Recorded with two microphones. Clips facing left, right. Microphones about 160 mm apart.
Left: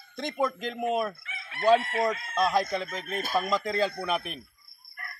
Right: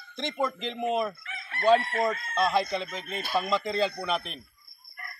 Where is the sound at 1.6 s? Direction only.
15° left (ahead or behind).